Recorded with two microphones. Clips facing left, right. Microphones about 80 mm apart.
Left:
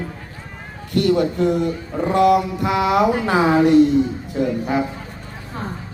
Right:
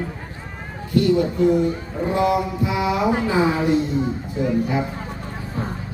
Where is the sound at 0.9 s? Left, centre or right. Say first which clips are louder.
Left 1 dB; left.